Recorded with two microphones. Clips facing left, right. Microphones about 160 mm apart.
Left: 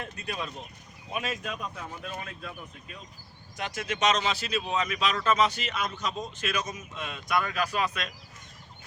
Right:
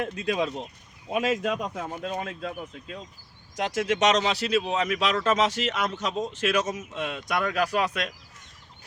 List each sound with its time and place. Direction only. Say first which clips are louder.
0.0 s speech: right 9 dB; 90° right
1.7 s speech: right 7 dB; 55° right (ahead or behind)
2.0 s speech: right 9 dB; 90° right
3.5 s speech: right 8 dB; 90° right; by 7.9 s 70° right (ahead or behind)